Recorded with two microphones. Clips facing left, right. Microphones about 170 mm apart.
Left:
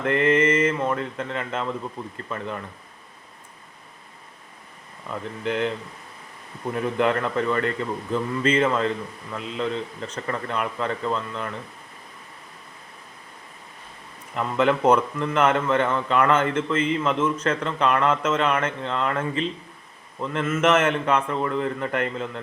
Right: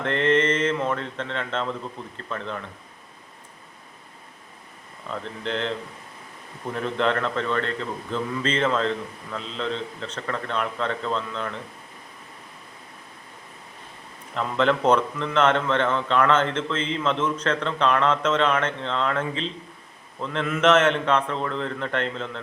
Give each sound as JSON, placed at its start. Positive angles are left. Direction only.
{"t": 0.0, "sound": "speech", "side_deg": 5}
{"t": 5.1, "sound": "speech", "side_deg": 10}
{"t": 6.7, "sound": "speech", "side_deg": 10}
{"t": 14.3, "sound": "speech", "side_deg": 5}